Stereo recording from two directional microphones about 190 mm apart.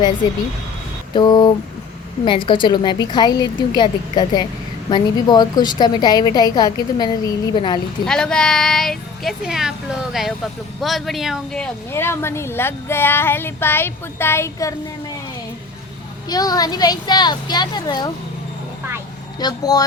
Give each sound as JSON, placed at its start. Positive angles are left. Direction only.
{"t": 1.1, "sound": "a woman's voice", "side_deg": 20}
{"t": 8.0, "sound": "a woman's voice", "side_deg": 5}
{"t": 16.3, "sound": "a woman's voice", "side_deg": 20}
{"t": 19.4, "sound": "a woman's voice", "side_deg": 20}